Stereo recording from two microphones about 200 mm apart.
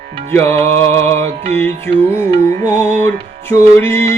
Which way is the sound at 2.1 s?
15° left (ahead or behind).